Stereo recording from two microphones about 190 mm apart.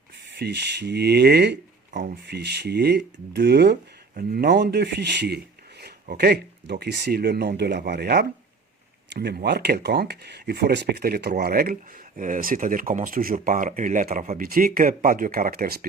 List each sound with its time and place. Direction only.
0.3 s speech: 60° right (ahead or behind)
1.9 s speech: 40° right (ahead or behind)
2.2 s speech: 60° right (ahead or behind)
4.1 s speech: 50° right (ahead or behind)